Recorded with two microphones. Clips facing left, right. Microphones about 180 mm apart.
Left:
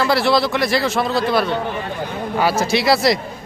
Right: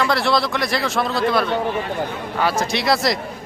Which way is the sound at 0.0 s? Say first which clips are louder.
Left 3 dB; 5° left (ahead or behind).